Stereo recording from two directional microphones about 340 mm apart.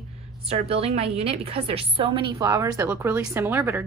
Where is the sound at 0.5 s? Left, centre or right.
Centre.